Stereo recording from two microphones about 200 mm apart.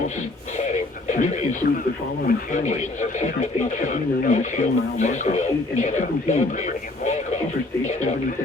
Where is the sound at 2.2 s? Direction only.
35° left (ahead or behind).